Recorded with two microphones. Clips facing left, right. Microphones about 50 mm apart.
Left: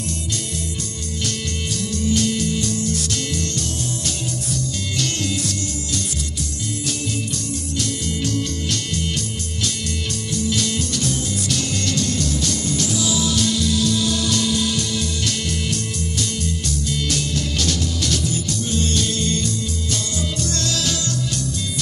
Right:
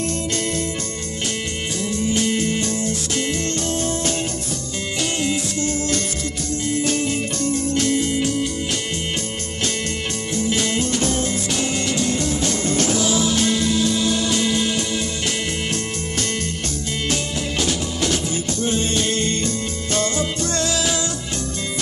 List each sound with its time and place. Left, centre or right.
1.8 s music: right
7.4 s music: right
8.1 s music: right
10.3 s music: right
12.7 s music: right
17.1 s music: right
20.5 s music: centre